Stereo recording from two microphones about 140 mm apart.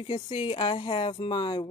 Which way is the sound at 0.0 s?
35° left (ahead or behind).